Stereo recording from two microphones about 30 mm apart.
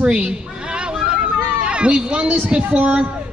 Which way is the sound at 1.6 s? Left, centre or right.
Right.